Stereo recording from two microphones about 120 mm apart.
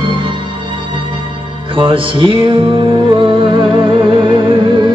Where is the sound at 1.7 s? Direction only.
45° right (ahead or behind).